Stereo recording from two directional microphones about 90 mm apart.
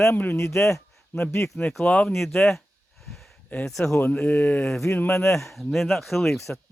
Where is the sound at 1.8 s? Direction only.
15° left (ahead or behind).